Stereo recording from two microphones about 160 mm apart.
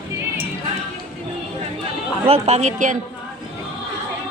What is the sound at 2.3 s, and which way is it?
Speech, 40° right (ahead or behind).